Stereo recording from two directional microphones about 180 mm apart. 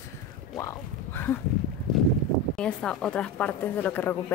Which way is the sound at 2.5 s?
5° left (ahead or behind).